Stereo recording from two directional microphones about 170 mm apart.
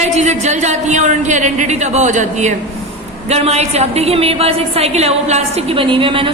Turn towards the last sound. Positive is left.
turn(degrees=-30)  # may be behind; listen again after turning